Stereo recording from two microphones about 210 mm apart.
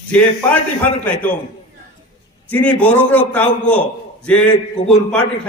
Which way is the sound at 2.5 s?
5° left (ahead or behind).